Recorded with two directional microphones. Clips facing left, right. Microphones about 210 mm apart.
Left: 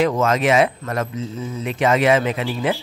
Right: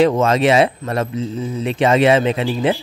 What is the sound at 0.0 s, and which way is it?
Speech, 30° right (ahead or behind).